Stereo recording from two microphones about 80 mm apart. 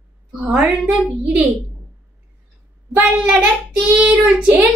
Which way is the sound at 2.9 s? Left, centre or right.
Centre.